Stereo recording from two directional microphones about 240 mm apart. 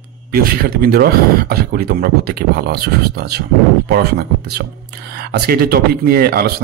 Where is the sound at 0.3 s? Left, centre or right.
Right.